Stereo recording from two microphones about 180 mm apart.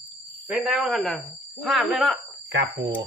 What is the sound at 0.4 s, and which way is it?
Speech, 5° right (ahead or behind).